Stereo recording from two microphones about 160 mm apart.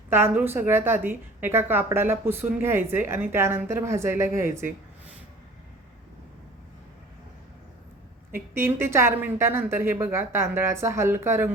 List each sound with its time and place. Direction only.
0.1 s a woman's voice: 15° right (ahead or behind)
8.3 s a woman's voice: 15° right (ahead or behind)